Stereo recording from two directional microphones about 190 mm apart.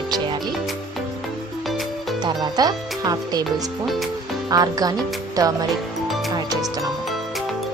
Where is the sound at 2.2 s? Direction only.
20° right (ahead or behind).